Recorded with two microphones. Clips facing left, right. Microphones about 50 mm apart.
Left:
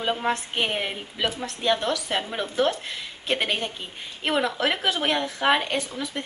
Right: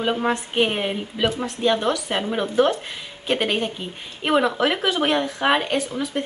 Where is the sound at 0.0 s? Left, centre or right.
Centre.